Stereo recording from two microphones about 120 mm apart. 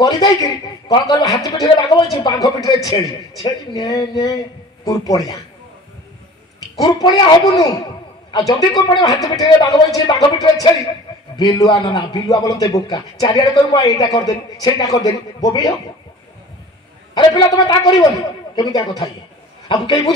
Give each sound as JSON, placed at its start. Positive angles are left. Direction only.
{"t": 0.0, "sound": "a man's voice", "side_deg": 30}
{"t": 6.8, "sound": "a man's voice", "side_deg": 35}
{"t": 11.8, "sound": "a man's voice", "side_deg": 40}
{"t": 17.1, "sound": "a man's voice", "side_deg": 40}
{"t": 19.7, "sound": "a man's voice", "side_deg": 40}